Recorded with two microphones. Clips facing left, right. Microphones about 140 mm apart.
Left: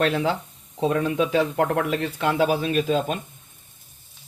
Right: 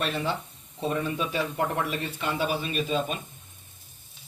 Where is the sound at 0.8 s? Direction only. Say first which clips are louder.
Left 7 dB; 90° left.